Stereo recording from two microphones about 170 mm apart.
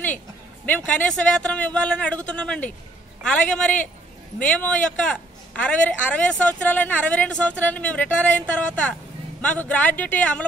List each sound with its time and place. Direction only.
0.7 s a man's voice: 5° left (ahead or behind)